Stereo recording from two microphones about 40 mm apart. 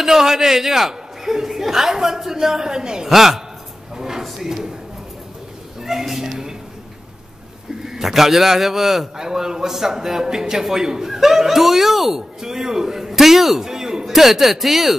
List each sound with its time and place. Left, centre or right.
0.0 s a man's voice: centre
3.1 s a man's voice: centre
3.9 s drawer open or close: centre
4.2 s a sound: centre
5.8 s a sound: centre
7.8 s a man's voice: centre